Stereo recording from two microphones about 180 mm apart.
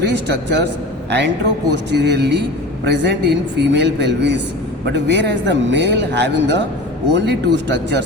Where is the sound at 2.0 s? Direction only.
70° right (ahead or behind).